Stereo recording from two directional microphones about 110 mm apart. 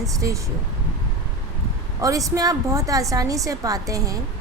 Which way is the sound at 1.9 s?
30° right (ahead or behind).